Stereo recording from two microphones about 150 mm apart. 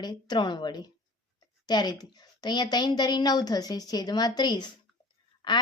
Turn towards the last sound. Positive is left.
turn(degrees=30)  # may be behind; listen again after turning